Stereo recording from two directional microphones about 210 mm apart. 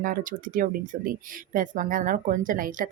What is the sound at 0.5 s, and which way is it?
Speech, 40° right (ahead or behind).